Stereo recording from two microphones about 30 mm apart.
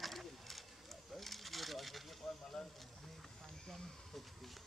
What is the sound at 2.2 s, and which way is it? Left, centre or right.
Snake, left.